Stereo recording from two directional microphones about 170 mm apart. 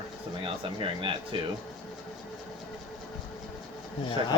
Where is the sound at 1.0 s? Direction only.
30° right (ahead or behind).